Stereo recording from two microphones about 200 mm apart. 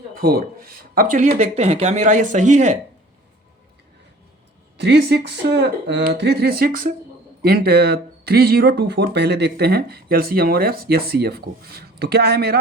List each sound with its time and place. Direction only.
0.2 s speech: 50° right (ahead or behind)
4.8 s speech: 55° right (ahead or behind)